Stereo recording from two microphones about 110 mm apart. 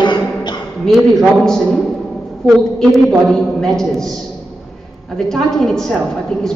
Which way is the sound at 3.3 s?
5° left (ahead or behind).